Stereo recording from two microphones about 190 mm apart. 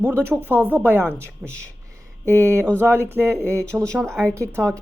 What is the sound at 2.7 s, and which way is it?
Speech, 10° right (ahead or behind).